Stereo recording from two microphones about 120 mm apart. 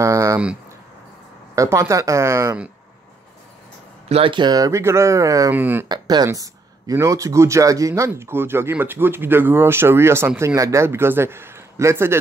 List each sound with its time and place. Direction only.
0.0 s a sound: 25° right (ahead or behind)
1.5 s speech: 25° right (ahead or behind)
4.1 s speech: 45° right (ahead or behind); by 5.5 s 25° right (ahead or behind)
5.5 s speech: 15° right (ahead or behind)
5.9 s speech: 35° right (ahead or behind)